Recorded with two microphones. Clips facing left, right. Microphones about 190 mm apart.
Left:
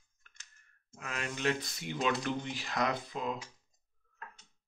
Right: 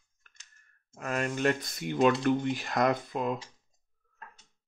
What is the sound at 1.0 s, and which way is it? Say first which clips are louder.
Speech: right 7 dB; 45° right (ahead or behind).